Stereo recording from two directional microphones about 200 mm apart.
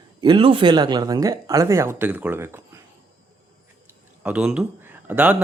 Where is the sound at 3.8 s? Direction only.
5° right (ahead or behind).